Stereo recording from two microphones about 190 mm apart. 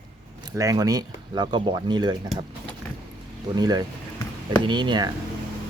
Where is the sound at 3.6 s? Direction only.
20° right (ahead or behind).